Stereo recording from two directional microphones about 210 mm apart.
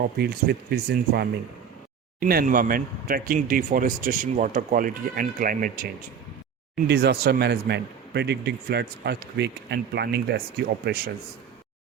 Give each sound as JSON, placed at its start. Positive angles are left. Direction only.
{"t": 0.0, "sound": "speech", "side_deg": -50}